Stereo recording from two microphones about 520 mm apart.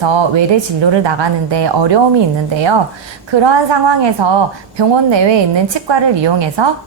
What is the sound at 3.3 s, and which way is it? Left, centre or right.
A woman's voice, right.